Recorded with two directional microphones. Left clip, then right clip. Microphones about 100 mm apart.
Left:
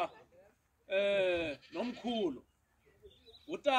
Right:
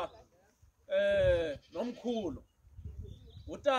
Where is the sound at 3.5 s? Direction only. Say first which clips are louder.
Right 2 dB; 50° right (ahead or behind).